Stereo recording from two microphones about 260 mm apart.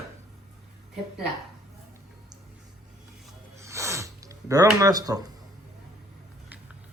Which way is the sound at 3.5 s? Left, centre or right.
Centre.